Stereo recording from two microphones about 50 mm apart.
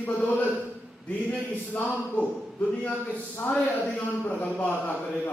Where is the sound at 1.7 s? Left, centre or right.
Left.